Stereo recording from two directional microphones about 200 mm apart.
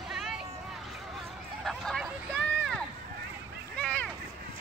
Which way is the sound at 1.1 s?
Centre (ahead or behind).